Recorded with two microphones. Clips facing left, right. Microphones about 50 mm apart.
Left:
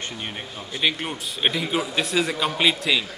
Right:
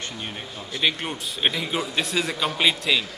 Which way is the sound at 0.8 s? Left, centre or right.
Centre.